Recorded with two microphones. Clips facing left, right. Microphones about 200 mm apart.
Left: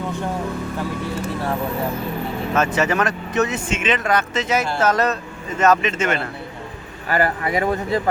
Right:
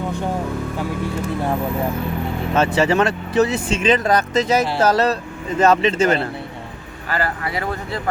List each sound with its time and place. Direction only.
2.5 s speech: 30° right (ahead or behind)
7.1 s speech: 20° left (ahead or behind)